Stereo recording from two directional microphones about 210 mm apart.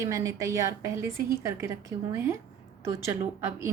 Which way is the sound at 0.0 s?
15° right (ahead or behind).